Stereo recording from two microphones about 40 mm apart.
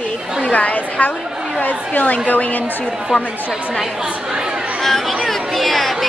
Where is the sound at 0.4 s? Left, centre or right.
Left.